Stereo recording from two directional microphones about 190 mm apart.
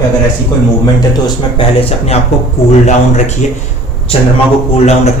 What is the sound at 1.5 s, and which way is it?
Speech, 30° left (ahead or behind).